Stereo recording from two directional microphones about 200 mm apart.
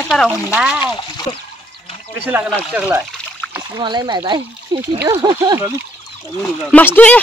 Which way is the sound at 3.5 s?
20° right (ahead or behind).